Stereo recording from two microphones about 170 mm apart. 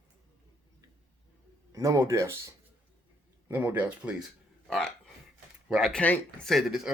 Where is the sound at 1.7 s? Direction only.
20° right (ahead or behind).